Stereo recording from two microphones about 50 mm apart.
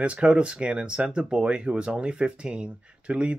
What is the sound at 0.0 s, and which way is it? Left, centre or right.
Speech, right.